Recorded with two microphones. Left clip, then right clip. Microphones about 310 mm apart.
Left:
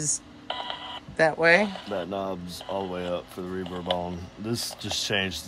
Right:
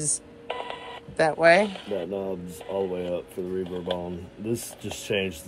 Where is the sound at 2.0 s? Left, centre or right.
Left.